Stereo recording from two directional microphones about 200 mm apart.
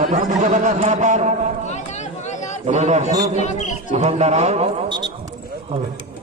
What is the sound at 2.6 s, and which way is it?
Speech, 35° right (ahead or behind).